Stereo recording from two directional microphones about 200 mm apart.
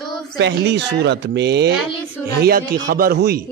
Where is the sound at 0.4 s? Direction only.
60° right (ahead or behind).